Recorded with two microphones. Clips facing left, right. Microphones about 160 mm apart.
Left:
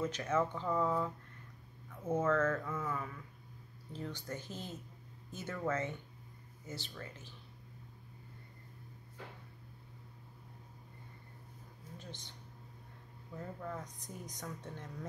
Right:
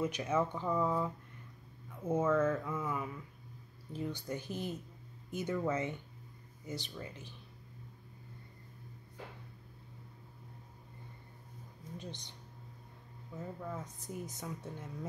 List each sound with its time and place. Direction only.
0.0 s speech: 10° right (ahead or behind)
12.0 s speech: 15° right (ahead or behind)
13.4 s speech: 5° right (ahead or behind)